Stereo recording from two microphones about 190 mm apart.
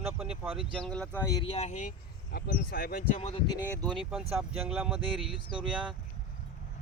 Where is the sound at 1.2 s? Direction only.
20° left (ahead or behind); by 1.9 s 40° left (ahead or behind).